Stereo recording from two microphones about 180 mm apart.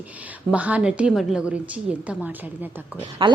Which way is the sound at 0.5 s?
10° right (ahead or behind).